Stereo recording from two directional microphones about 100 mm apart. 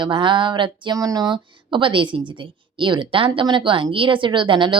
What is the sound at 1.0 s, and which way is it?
Speech, 40° right (ahead or behind).